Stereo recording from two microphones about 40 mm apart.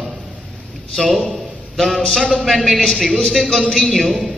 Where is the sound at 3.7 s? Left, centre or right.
Centre.